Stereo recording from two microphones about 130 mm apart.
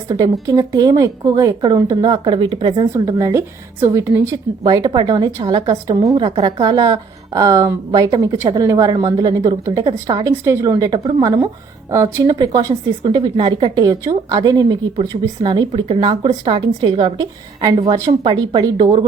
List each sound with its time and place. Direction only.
0.1 s a woman's voice: 30° right (ahead or behind)
2.9 s a woman's voice: 20° right (ahead or behind)